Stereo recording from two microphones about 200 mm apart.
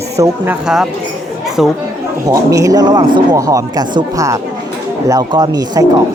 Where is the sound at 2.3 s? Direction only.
15° right (ahead or behind).